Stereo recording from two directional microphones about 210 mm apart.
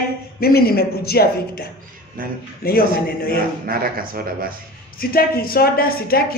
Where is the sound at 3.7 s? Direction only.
45° right (ahead or behind).